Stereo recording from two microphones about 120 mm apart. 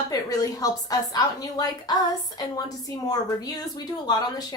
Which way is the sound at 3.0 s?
30° left (ahead or behind).